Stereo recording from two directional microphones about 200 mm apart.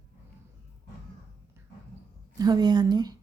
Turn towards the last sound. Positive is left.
turn(degrees=-20)  # may be behind; listen again after turning